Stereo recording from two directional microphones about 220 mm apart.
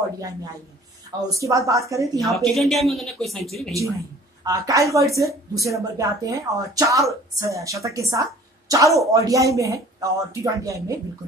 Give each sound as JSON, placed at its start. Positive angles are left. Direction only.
{"t": 1.3, "sound": "speech", "side_deg": -15}
{"t": 2.1, "sound": "speech", "side_deg": 0}
{"t": 4.5, "sound": "speech", "side_deg": -15}